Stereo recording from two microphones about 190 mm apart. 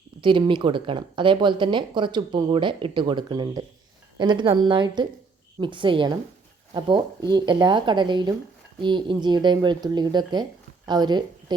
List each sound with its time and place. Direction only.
0.2 s a woman's voice: 25° right (ahead or behind)